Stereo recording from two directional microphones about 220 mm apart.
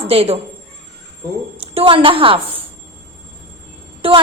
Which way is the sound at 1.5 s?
25° right (ahead or behind).